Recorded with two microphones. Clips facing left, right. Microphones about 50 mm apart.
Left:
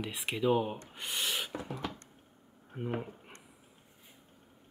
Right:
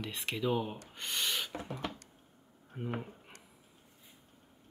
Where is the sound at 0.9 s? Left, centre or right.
Centre.